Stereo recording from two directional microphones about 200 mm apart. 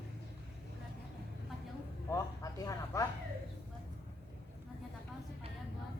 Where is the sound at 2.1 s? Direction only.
15° left (ahead or behind).